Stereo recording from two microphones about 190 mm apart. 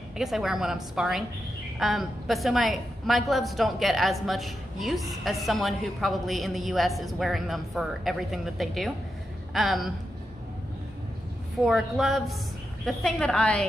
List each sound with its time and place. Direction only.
0.2 s a woman's voice: centre (ahead or behind)
11.6 s a woman's voice: centre (ahead or behind)